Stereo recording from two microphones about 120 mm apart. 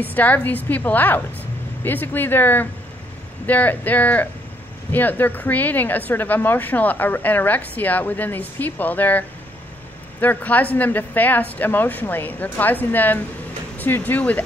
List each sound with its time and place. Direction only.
0.0 s a woman's voice: 15° left (ahead or behind)
10.2 s a woman's voice: 15° left (ahead or behind)